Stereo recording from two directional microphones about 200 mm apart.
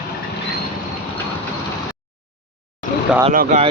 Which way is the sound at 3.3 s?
45° right (ahead or behind).